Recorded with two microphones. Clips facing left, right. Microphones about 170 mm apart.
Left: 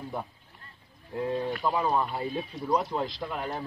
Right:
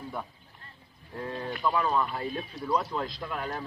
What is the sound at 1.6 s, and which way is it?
Speech, 20° left (ahead or behind).